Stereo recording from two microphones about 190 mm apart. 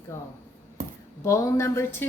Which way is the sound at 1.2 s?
15° left (ahead or behind).